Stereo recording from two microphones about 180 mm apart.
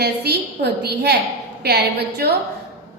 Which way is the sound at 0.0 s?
65° right (ahead or behind).